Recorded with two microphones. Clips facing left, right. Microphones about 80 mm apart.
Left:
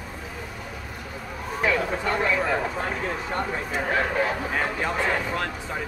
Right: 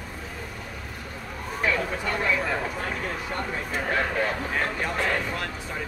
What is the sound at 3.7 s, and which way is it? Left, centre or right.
Speech, centre.